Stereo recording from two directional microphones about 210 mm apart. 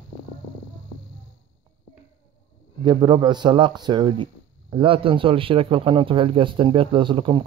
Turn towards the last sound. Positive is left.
turn(degrees=-25)  # may be behind; listen again after turning